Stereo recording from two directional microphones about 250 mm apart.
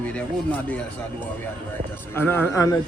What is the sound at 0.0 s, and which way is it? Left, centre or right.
Speech, centre.